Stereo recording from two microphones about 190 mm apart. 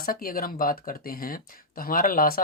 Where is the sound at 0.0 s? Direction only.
50° left (ahead or behind).